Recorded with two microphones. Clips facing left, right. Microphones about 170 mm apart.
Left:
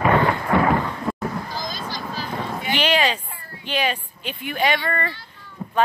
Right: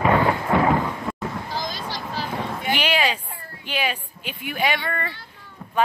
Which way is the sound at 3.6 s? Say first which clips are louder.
Left 3 dB; 10° right (ahead or behind).